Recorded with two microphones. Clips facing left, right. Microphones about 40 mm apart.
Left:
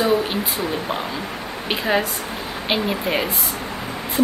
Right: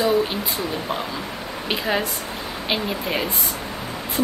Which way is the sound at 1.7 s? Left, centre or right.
Centre.